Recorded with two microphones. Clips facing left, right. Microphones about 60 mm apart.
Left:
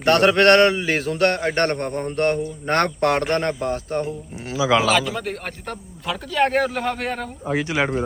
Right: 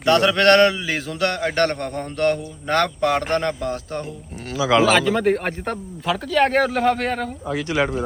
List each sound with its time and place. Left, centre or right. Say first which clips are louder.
0.0 s a man's voice: left 1 dB; left
0.9 s a man's voice: left 3 dB; left
2.7 s a man's voice: even; left
3.3 s a man's voice: even; left
4.5 s speech: right 1 dB; centre
4.9 s speech: right 4 dB; centre
6.3 s speech: right 1 dB; centre